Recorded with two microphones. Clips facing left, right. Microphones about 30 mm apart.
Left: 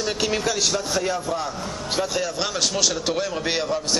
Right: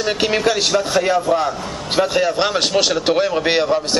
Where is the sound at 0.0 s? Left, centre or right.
Right.